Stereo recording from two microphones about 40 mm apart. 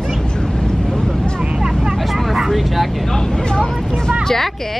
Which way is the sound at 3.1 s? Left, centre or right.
Centre.